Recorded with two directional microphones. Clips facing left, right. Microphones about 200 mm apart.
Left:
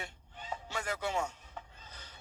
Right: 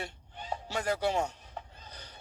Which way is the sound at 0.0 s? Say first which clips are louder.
Right 5 dB; 35° right (ahead or behind).